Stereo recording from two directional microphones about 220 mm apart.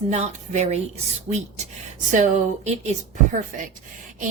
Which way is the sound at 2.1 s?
35° right (ahead or behind).